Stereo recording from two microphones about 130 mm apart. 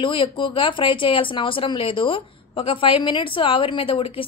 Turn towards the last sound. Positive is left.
turn(degrees=45)  # may be behind; listen again after turning